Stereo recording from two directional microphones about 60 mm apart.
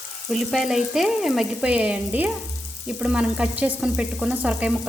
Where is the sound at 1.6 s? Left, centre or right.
Right.